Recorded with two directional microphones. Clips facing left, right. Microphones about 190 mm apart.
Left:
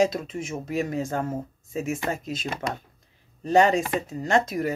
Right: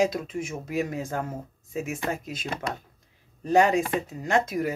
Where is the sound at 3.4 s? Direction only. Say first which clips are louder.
Left 1 dB; 5° right (ahead or behind).